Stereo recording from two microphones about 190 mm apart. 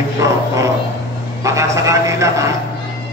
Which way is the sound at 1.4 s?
15° right (ahead or behind).